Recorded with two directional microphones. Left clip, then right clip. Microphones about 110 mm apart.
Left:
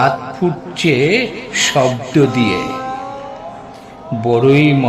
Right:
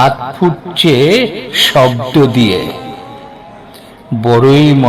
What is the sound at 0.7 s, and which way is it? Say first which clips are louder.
A man's voice: right 5 dB; 45° right (ahead or behind).